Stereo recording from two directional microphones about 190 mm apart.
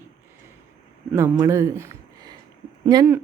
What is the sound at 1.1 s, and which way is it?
Speech, 15° right (ahead or behind).